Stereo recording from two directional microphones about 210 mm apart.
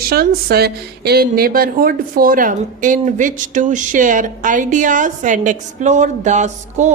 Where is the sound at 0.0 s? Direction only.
45° right (ahead or behind).